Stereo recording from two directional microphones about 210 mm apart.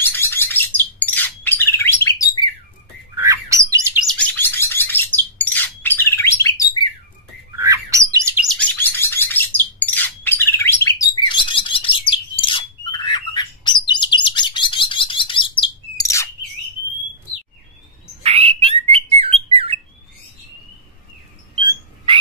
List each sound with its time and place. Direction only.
0.0 s bird: 10° left (ahead or behind)
3.2 s bird: 15° right (ahead or behind)
4.1 s bird: 5° left (ahead or behind)
7.5 s bird: 15° right (ahead or behind)
8.5 s bird: 10° left (ahead or behind)
18.2 s bird: 30° right (ahead or behind)